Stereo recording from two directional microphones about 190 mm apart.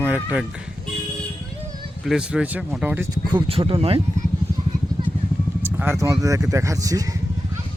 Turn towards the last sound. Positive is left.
turn(degrees=-15)  # may be behind; listen again after turning